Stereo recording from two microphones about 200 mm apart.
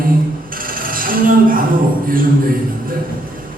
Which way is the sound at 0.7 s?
45° right (ahead or behind).